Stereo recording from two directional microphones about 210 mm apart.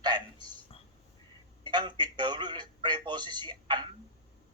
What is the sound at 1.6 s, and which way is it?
A man's voice, 20° right (ahead or behind).